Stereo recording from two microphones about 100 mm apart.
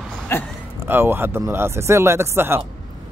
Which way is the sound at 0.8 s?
25° right (ahead or behind).